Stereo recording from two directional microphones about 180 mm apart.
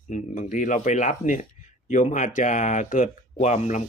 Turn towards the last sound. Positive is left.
turn(degrees=40)  # may be behind; listen again after turning